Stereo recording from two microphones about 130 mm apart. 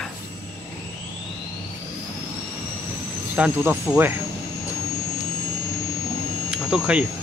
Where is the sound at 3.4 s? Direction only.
15° right (ahead or behind).